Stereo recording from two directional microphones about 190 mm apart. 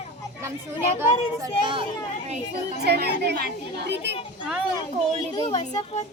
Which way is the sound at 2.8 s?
60° right (ahead or behind).